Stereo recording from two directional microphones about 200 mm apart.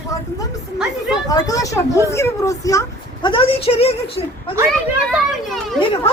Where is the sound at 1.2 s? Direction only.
15° left (ahead or behind).